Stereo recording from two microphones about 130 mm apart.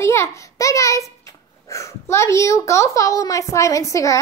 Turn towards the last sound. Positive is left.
turn(degrees=25)  # may be behind; listen again after turning